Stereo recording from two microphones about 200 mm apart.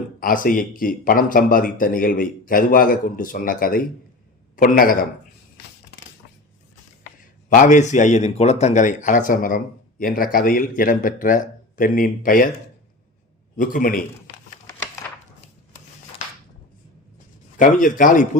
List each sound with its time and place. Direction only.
0.2 s a man's voice: 45° left (ahead or behind)
7.0 s a man's voice: 40° left (ahead or behind)
13.6 s a man's voice: 45° left (ahead or behind)
17.6 s speech: 40° left (ahead or behind)